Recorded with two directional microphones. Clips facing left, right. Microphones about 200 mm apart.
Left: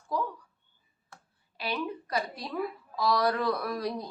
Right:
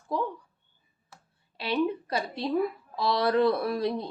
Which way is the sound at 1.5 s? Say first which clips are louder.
Right 6 dB; 30° right (ahead or behind).